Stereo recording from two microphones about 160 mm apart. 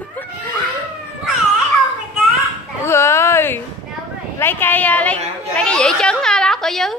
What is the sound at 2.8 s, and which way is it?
A woman's voice, 15° left (ahead or behind).